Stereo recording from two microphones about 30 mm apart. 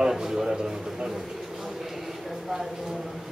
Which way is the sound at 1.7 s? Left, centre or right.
Centre.